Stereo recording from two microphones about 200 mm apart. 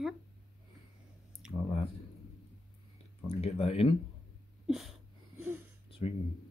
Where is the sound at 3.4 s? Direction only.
30° left (ahead or behind).